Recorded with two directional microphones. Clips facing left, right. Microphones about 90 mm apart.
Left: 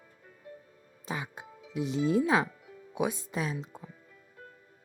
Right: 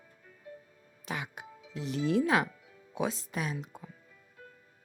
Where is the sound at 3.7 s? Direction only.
30° left (ahead or behind).